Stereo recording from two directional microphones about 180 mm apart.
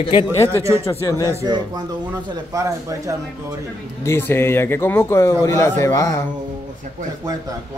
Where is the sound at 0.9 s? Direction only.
15° left (ahead or behind).